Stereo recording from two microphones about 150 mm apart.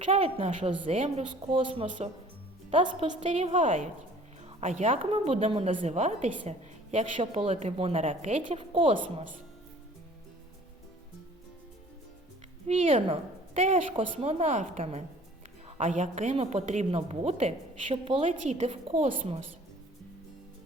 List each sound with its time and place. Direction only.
0.1 s a woman's voice: 40° right (ahead or behind)
8.9 s a woman's voice: 50° right (ahead or behind)
12.6 s a woman's voice: 45° right (ahead or behind)
16.3 s a woman's voice: 45° right (ahead or behind)
18.3 s a woman's voice: 50° right (ahead or behind)